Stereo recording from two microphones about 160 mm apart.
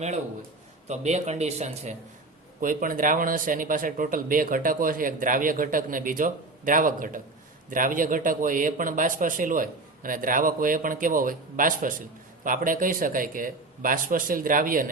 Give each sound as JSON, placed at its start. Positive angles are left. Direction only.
{"t": 0.9, "sound": "speech", "side_deg": -45}
{"t": 2.6, "sound": "a man's voice", "side_deg": -60}